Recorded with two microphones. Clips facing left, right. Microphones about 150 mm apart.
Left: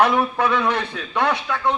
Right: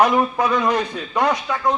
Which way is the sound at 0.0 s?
15° right (ahead or behind).